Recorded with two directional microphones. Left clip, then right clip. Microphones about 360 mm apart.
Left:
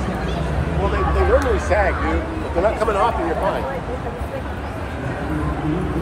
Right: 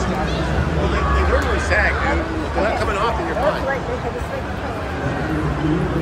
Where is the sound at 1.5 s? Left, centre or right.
Centre.